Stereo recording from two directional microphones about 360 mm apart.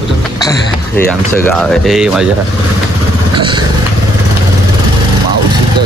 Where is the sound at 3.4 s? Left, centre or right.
Centre.